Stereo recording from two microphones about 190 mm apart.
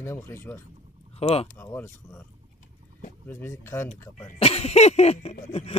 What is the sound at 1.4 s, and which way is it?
Speech, 15° left (ahead or behind).